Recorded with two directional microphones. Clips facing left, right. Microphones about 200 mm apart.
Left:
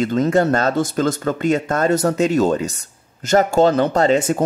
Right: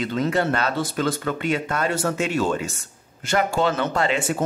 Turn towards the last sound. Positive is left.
turn(degrees=40)  # may be behind; listen again after turning